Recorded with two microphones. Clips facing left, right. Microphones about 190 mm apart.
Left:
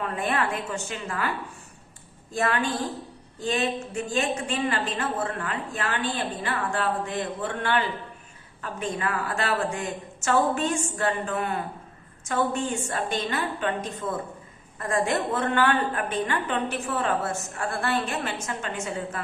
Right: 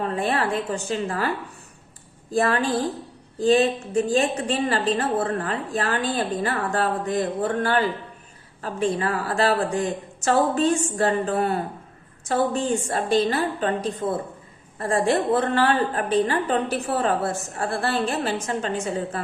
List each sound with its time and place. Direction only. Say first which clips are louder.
0.0 s a woman's voice: right 3 dB; 30° right (ahead or behind)
2.3 s a woman's voice: right 5 dB; 35° right (ahead or behind)